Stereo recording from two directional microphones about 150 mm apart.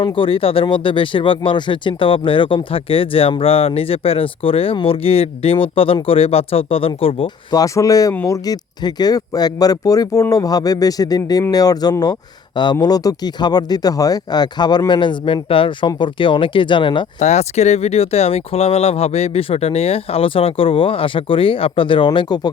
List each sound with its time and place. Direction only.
0.0 s speech: 35° left (ahead or behind)
7.6 s speech: 25° left (ahead or behind)
17.2 s speech: 50° left (ahead or behind); by 22.4 s 30° left (ahead or behind)